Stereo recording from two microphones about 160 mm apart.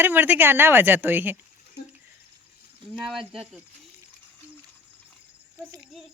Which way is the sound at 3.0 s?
Centre (ahead or behind).